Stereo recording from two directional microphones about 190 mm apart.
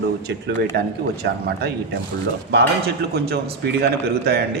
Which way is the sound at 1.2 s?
55° right (ahead or behind).